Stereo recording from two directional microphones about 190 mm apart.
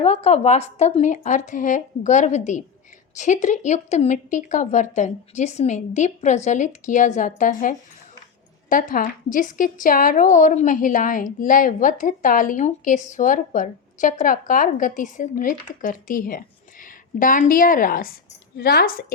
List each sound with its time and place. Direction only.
0.0 s a woman's voice: 35° left (ahead or behind); by 19.0 s 55° left (ahead or behind)